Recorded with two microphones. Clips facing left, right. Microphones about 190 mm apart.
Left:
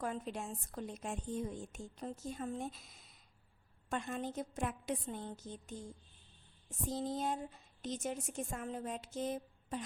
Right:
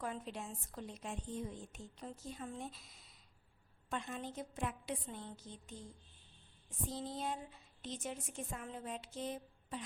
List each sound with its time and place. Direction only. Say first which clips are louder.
0.0 s a woman's voice: left 3 dB; 45° left (ahead or behind)
6.9 s a woman's voice: left 5 dB; 45° left (ahead or behind)